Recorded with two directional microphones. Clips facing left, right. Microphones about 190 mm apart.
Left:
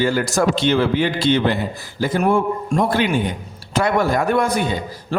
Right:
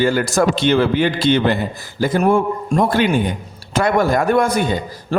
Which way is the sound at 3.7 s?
45° right (ahead or behind).